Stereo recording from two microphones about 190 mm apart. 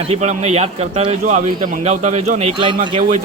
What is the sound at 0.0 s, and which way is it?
A man's voice, 35° right (ahead or behind).